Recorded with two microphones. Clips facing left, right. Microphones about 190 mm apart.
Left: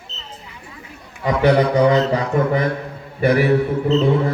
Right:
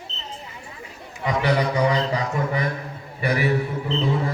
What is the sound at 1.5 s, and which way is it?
A man's voice, 55° left (ahead or behind).